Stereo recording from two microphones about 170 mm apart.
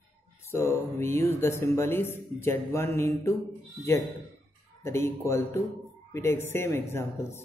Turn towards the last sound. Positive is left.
turn(degrees=15)  # may be behind; listen again after turning